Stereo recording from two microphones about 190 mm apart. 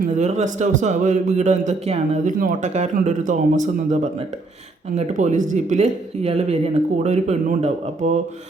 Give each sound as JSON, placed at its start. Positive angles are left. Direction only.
{"t": 0.0, "sound": "a man's voice", "side_deg": -35}